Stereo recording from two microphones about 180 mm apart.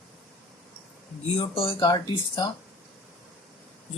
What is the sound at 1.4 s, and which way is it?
Speech, 30° left (ahead or behind).